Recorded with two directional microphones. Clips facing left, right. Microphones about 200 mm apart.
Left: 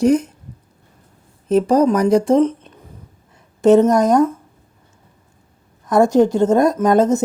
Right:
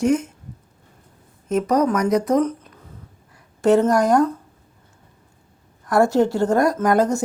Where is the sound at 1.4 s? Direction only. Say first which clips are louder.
Left 5 dB; 30° left (ahead or behind).